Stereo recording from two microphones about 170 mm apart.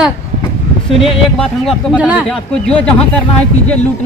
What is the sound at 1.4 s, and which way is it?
A man's voice, centre (ahead or behind).